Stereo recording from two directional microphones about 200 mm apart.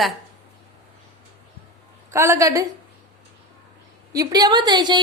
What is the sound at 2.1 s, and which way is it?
Speech, 15° right (ahead or behind).